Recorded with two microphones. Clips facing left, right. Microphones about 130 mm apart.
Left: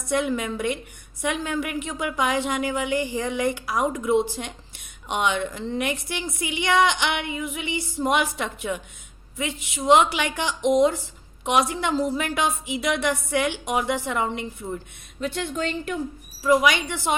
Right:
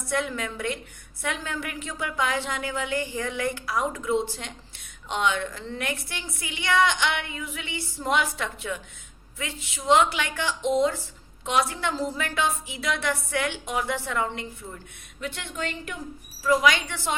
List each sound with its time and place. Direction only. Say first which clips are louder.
0.1 s a woman's voice: left 5 dB; 15° left (ahead or behind)
15.2 s a woman's voice: left 6 dB; 35° left (ahead or behind)
16.4 s a woman's voice: left 2 dB; 15° left (ahead or behind)